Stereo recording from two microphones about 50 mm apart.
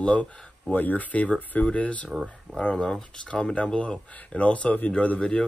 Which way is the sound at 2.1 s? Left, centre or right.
Centre.